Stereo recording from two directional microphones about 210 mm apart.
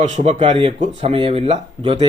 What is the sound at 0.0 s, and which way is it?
A man's voice, 30° right (ahead or behind).